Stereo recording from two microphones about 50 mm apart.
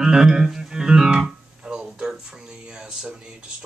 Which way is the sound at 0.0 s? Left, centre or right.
Centre.